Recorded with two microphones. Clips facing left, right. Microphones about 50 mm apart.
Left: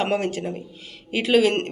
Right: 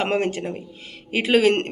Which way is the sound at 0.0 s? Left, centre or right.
Right.